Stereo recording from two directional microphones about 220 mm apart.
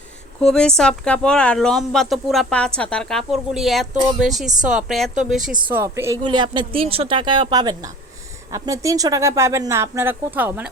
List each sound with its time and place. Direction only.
0.4 s a woman's voice: 5° left (ahead or behind)